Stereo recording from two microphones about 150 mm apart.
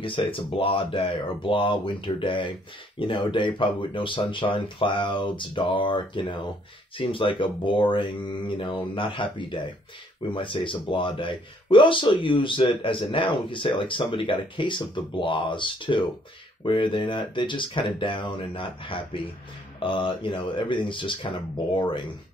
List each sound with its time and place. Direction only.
0.0 s speech: 35° left (ahead or behind)